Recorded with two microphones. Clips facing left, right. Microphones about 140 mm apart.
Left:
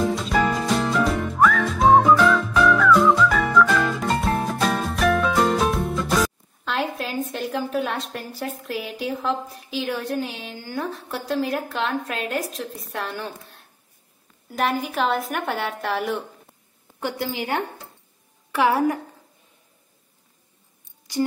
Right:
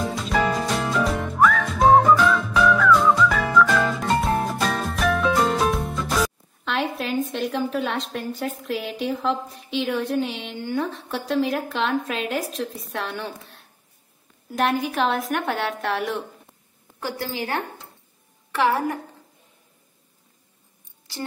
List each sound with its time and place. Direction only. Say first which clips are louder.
0.0 s music: left 2 dB; centre (ahead or behind)
14.5 s a woman's voice: right 1 dB; centre (ahead or behind)
17.0 s a woman's voice: left 2 dB; 20° left (ahead or behind)